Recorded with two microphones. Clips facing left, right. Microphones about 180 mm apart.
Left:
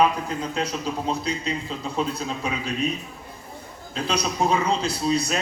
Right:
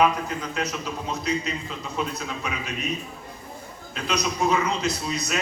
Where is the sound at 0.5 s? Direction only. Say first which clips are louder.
Left 3 dB; 30° left (ahead or behind).